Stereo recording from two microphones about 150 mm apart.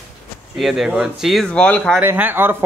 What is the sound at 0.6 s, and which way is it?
Speech, centre (ahead or behind).